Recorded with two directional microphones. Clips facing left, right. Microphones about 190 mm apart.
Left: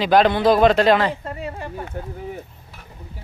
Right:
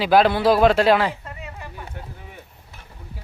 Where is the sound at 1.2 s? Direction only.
35° left (ahead or behind).